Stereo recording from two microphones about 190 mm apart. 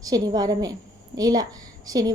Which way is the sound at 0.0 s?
20° right (ahead or behind).